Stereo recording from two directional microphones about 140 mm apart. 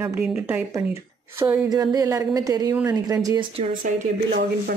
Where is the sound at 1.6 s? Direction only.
25° right (ahead or behind).